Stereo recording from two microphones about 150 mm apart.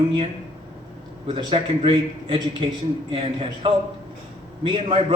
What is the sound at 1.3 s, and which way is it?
A man's voice, 35° right (ahead or behind).